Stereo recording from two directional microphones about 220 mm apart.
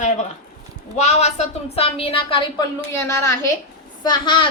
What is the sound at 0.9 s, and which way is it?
A woman's voice, 30° left (ahead or behind).